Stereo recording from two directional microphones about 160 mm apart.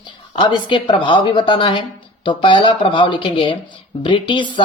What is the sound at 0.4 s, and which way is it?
Speech, 30° left (ahead or behind).